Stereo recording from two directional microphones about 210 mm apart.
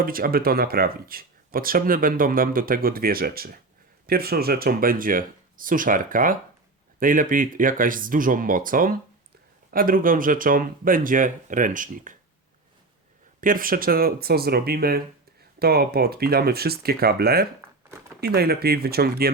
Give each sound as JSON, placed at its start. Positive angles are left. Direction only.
{"t": 0.0, "sound": "speech", "side_deg": -45}
{"t": 13.4, "sound": "speech", "side_deg": -40}